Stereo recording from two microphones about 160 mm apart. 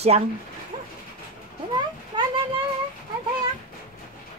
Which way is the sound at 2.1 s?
30° right (ahead or behind).